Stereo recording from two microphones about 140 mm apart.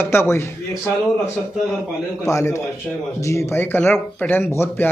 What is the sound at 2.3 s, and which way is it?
A man's voice, 20° left (ahead or behind).